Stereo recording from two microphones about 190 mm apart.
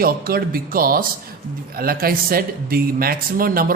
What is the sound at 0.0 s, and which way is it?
Speech, 50° right (ahead or behind).